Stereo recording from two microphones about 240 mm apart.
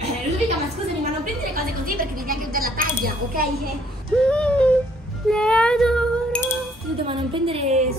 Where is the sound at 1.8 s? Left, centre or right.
Right.